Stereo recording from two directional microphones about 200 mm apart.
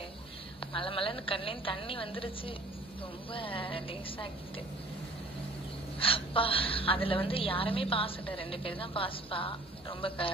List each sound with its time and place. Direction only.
0.6 s a woman's voice: 25° left (ahead or behind)
5.9 s a woman's voice: 25° left (ahead or behind)